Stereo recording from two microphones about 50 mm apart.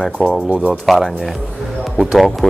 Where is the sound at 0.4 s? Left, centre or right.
Right.